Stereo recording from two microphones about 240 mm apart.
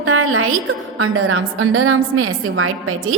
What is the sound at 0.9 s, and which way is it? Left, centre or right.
A woman's voice, right.